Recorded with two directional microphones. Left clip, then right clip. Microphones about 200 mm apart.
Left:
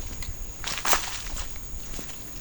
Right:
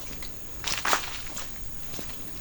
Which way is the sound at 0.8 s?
30° left (ahead or behind).